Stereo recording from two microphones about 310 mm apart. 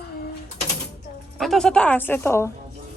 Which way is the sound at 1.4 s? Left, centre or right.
Centre.